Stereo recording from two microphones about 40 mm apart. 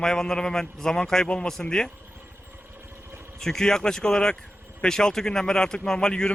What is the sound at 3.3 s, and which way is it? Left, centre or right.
A man's voice, centre.